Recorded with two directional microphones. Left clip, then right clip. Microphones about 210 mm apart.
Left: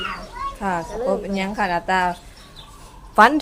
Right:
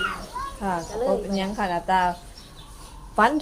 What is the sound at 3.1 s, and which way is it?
Speech, 35° left (ahead or behind).